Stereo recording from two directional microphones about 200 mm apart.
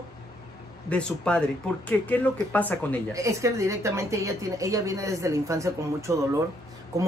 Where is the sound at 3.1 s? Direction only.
15° right (ahead or behind).